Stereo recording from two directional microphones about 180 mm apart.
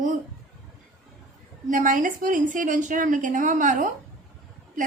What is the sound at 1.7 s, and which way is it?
A woman's voice, 45° right (ahead or behind).